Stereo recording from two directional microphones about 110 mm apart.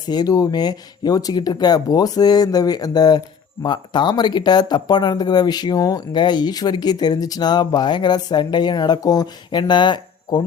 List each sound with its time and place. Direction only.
0.1 s speech: 35° left (ahead or behind)